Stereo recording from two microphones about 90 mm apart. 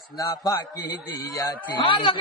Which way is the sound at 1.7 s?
70° left (ahead or behind).